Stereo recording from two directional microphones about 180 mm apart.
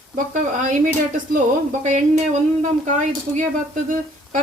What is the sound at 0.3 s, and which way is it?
Speech, 45° right (ahead or behind).